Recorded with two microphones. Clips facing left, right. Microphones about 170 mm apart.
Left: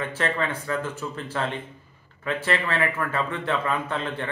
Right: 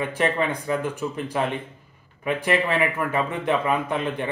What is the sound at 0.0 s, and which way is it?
Speech, 15° right (ahead or behind).